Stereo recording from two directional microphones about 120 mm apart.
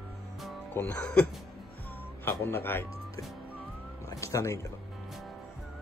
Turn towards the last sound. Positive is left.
turn(degrees=25)  # may be behind; listen again after turning